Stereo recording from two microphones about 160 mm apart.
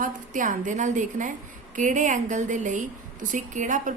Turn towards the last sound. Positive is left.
turn(degrees=-55)  # may be behind; listen again after turning